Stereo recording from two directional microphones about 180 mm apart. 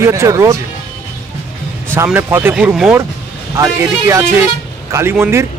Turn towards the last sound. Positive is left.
turn(degrees=-10)  # may be behind; listen again after turning